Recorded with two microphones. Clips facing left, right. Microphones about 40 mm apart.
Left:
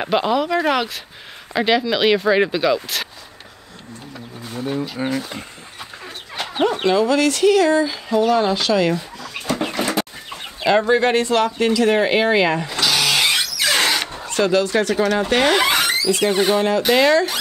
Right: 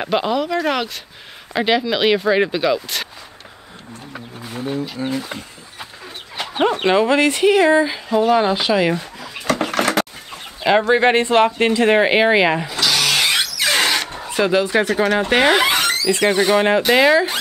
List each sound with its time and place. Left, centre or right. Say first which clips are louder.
0.0 s speech: left 1 dB; centre
4.4 s a sound: even; centre
5.0 s speech: left 2 dB; left
6.3 s chicken: even; centre
6.6 s speech: right 1 dB; right
9.5 s a sound: right 3 dB; right
10.6 s speech: right 1 dB; centre; by 12.0 s right
12.0 s speech: right 2 dB; right
12.8 s a sound: even; centre
13.6 s squeal: even; centre
14.1 s speech: even; centre
15.6 s a sound: right 1 dB; centre
16.1 s speech: right 3 dB; right
16.9 s speech: right 1 dB; centre